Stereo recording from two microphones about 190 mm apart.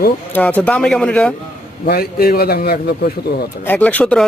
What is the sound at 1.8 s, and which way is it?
Speech, 50° left (ahead or behind).